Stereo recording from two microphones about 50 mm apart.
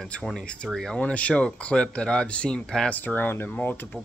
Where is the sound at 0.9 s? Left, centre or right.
Left.